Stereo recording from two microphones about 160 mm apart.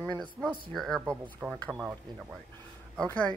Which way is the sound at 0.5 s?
Centre (ahead or behind).